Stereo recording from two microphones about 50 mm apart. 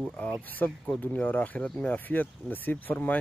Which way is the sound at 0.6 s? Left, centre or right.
Left.